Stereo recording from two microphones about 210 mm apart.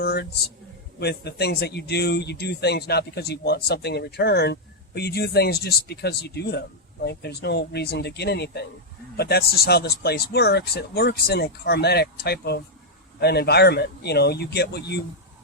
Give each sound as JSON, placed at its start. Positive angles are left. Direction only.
{"t": 0.0, "sound": "speech", "side_deg": 50}